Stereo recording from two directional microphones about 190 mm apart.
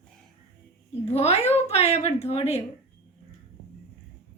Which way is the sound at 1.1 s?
35° left (ahead or behind).